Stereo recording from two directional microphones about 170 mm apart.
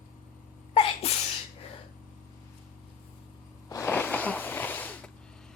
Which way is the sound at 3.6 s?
15° left (ahead or behind).